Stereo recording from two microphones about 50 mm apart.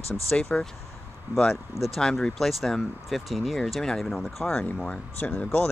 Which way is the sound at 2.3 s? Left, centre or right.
Centre.